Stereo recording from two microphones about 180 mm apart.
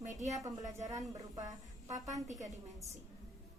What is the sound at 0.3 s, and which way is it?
Speech, 20° right (ahead or behind).